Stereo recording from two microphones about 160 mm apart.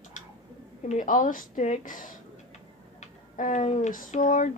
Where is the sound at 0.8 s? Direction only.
55° left (ahead or behind).